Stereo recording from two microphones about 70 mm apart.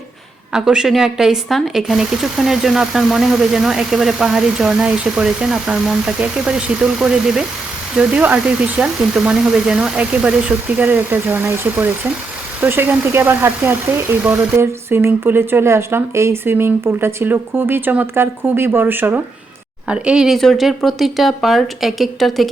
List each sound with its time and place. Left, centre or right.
0.5 s speech: centre; by 19.2 s right
19.9 s speech: centre